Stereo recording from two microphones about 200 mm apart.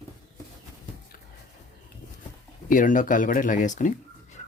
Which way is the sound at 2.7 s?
40° left (ahead or behind).